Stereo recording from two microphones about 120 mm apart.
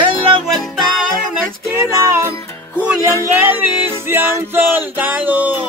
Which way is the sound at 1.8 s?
25° left (ahead or behind).